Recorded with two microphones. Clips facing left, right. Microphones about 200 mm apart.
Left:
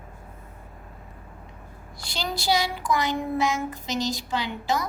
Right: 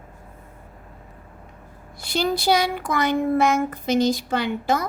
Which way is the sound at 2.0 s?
55° right (ahead or behind).